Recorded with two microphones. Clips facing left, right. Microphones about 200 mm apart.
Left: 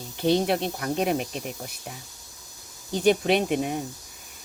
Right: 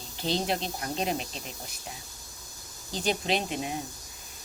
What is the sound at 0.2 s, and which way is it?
Speech, 60° left (ahead or behind).